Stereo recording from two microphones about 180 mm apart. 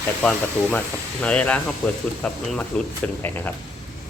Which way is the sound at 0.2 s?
5° left (ahead or behind).